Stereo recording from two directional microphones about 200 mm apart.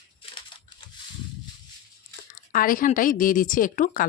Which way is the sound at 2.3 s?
45° left (ahead or behind).